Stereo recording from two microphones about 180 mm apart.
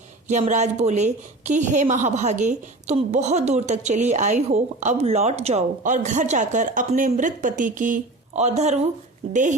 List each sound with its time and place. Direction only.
0.3 s a woman's voice: 40° right (ahead or behind)